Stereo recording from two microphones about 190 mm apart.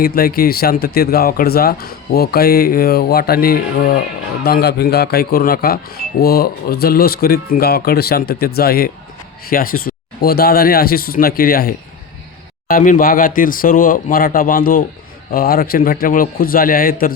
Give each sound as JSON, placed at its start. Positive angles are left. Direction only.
{"t": 0.0, "sound": "speech", "side_deg": 50}